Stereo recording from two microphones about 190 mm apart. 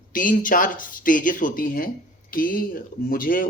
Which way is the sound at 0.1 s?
45° left (ahead or behind).